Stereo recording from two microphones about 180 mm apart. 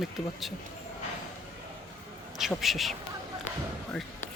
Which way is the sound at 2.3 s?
Centre (ahead or behind).